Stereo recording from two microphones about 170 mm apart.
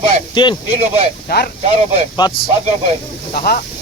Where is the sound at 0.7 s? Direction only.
40° right (ahead or behind).